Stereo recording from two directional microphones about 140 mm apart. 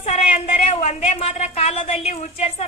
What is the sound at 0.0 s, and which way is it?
A woman's voice, 55° left (ahead or behind).